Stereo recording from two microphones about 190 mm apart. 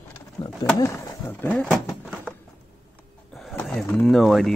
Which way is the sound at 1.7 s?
Centre (ahead or behind).